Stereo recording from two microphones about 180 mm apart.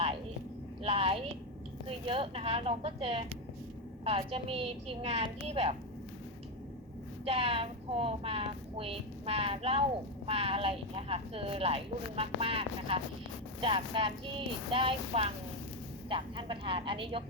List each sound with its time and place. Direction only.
0.8 s a sound: 30° right (ahead or behind)
2.0 s speech: 30° right (ahead or behind)
7.3 s a woman's voice: 30° right (ahead or behind)